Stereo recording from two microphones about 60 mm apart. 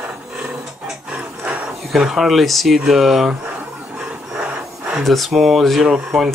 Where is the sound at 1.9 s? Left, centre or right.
Centre.